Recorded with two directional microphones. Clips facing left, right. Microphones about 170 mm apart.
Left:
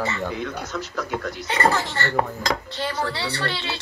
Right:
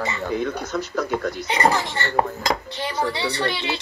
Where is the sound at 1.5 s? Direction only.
15° right (ahead or behind).